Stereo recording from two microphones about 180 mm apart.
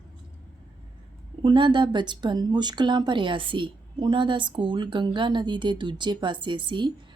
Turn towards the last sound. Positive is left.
turn(degrees=-25)  # may be behind; listen again after turning